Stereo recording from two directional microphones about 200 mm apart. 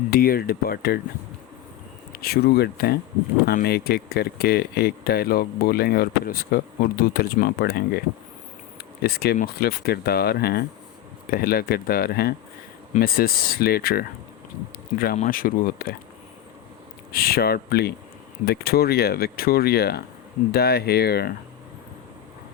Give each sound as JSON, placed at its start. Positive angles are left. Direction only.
{"t": 0.1, "sound": "speech", "side_deg": 50}
{"t": 2.1, "sound": "speech", "side_deg": 50}
{"t": 9.0, "sound": "speech", "side_deg": 50}
{"t": 17.1, "sound": "speech", "side_deg": 50}